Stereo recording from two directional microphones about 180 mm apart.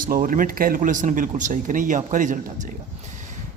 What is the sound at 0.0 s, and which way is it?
Speech, 50° right (ahead or behind).